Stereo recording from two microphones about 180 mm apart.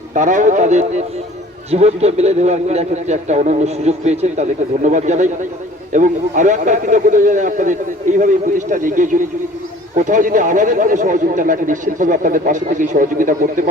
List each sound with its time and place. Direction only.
0.1 s a man's voice: 45° right (ahead or behind)